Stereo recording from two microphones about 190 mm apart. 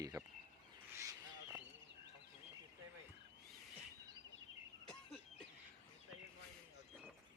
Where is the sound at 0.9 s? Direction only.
15° right (ahead or behind).